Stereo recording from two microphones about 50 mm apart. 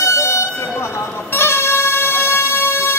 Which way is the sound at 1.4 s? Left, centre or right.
Left.